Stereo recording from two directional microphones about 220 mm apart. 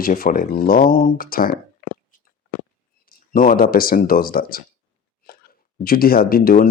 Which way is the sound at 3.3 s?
40° left (ahead or behind).